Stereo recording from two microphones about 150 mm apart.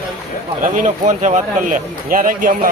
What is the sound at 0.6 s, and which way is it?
Speech, 55° right (ahead or behind).